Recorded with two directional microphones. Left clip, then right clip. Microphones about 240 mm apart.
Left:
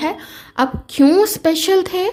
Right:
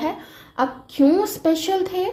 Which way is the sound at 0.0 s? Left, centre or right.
Left.